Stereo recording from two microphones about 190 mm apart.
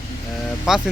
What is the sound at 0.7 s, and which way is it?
Speech, 5° right (ahead or behind).